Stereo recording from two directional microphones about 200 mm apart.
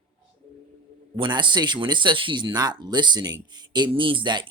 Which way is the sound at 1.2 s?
25° right (ahead or behind).